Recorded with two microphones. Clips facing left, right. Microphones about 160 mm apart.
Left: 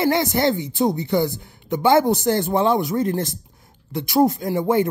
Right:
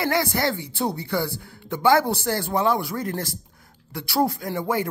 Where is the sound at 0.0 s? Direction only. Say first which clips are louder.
Left 4 dB; 20° left (ahead or behind).